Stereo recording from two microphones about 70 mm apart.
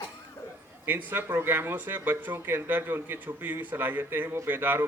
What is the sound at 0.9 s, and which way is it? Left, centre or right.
Speech, right.